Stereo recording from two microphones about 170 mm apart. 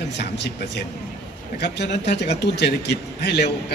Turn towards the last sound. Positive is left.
turn(degrees=85)